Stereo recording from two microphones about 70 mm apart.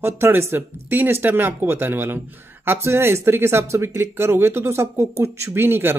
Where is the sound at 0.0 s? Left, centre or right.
Right.